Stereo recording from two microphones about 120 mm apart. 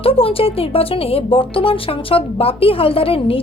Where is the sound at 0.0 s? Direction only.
50° left (ahead or behind).